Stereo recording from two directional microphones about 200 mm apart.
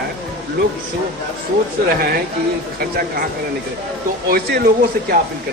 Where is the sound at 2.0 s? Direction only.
50° right (ahead or behind).